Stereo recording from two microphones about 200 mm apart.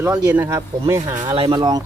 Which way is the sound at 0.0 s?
15° right (ahead or behind).